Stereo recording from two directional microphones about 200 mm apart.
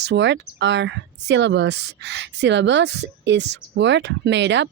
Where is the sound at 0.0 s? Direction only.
60° right (ahead or behind).